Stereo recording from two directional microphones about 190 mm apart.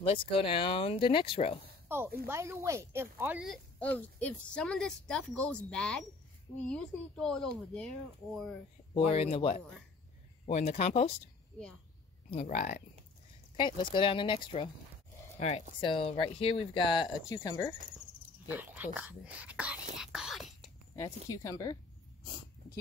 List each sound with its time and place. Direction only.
0.0 s speech: 30° left (ahead or behind)
1.9 s speech: 10° right (ahead or behind)
3.8 s a woman's voice: 10° left (ahead or behind)
8.9 s speech: 30° left (ahead or behind)
12.3 s speech: 35° left (ahead or behind)
13.6 s speech: 25° left (ahead or behind)
15.8 s speech: 30° left (ahead or behind)
17.3 s speech: 15° left (ahead or behind)
18.5 s speech: 10° right (ahead or behind)
20.9 s speech: 15° left (ahead or behind)